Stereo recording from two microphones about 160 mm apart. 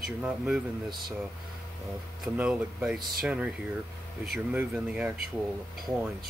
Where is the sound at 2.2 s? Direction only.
5° right (ahead or behind).